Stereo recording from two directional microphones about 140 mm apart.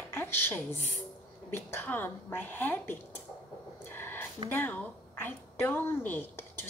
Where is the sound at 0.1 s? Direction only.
15° left (ahead or behind).